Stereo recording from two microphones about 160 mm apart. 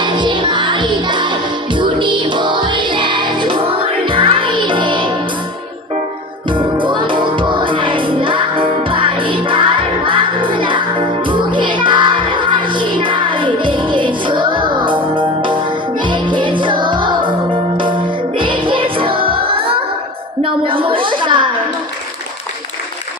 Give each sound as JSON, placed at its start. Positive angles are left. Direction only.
{"t": 0.0, "sound": "music", "side_deg": -30}
{"t": 6.5, "sound": "music", "side_deg": -30}
{"t": 20.4, "sound": "a sound", "side_deg": -35}